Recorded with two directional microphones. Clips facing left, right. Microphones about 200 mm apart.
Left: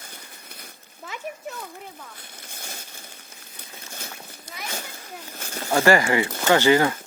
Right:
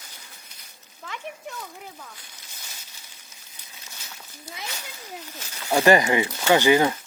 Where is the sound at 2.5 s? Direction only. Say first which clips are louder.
Left 9 dB; 55° left (ahead or behind).